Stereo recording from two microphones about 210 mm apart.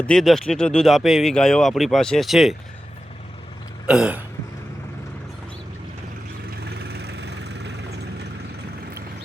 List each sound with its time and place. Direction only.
0.0 s speech: 5° left (ahead or behind)
3.8 s speech: 5° right (ahead or behind)
6.7 s vehicle: 50° right (ahead or behind)